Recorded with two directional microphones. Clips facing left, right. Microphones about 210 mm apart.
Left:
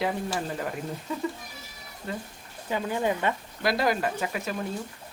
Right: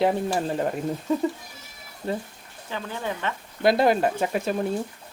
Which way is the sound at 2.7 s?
15° left (ahead or behind).